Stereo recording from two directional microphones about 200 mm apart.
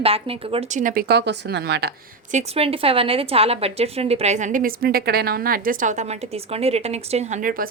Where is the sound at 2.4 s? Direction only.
30° right (ahead or behind).